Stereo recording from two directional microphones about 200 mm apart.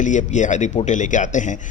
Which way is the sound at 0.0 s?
40° left (ahead or behind).